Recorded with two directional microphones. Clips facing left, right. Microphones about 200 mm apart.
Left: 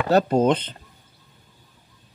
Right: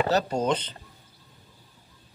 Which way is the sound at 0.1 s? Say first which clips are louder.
Left 6 dB; 55° left (ahead or behind).